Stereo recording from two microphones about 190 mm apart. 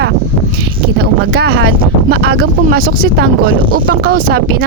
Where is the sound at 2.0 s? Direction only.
60° right (ahead or behind).